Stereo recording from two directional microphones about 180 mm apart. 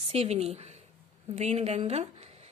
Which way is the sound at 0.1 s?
35° right (ahead or behind).